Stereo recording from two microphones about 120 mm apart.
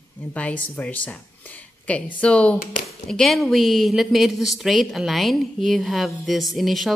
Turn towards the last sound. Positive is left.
turn(degrees=0)  # may be behind; listen again after turning